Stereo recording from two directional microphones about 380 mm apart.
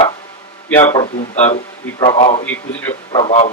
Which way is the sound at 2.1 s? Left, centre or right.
Centre.